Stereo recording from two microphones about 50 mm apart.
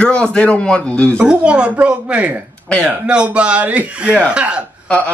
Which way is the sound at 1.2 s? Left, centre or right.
Centre.